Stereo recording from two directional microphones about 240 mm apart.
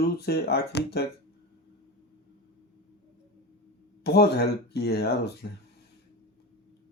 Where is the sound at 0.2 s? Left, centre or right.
Left.